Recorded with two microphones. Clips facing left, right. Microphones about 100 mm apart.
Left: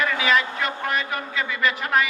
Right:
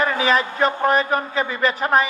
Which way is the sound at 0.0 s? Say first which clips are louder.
Right 3 dB; 35° right (ahead or behind).